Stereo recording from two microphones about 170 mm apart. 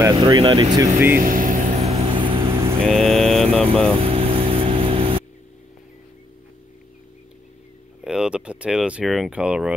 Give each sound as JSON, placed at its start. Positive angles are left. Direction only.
{"t": 0.0, "sound": "speech", "side_deg": -25}
{"t": 0.9, "sound": "speech", "side_deg": -15}
{"t": 1.2, "sound": "a sound", "side_deg": -50}
{"t": 1.9, "sound": "vehicle", "side_deg": -35}
{"t": 2.8, "sound": "speech", "side_deg": 0}
{"t": 4.0, "sound": "vehicle", "side_deg": -35}
{"t": 8.0, "sound": "speech", "side_deg": -5}